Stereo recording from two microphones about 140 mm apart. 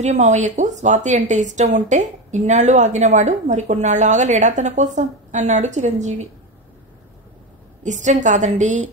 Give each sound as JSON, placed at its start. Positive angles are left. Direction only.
{"t": 0.0, "sound": "speech", "side_deg": -60}
{"t": 7.8, "sound": "speech", "side_deg": -60}